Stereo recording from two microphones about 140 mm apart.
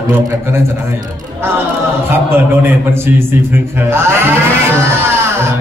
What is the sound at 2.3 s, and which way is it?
A man's voice, 15° right (ahead or behind).